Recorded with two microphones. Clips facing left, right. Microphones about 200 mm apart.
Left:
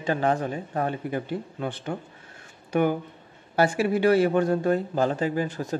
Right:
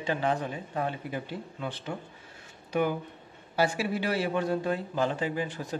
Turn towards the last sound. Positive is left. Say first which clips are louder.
# left 5 dB
turn(degrees=45)  # may be behind; listen again after turning